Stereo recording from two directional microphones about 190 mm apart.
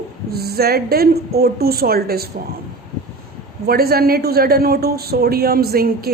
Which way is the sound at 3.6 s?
55° right (ahead or behind).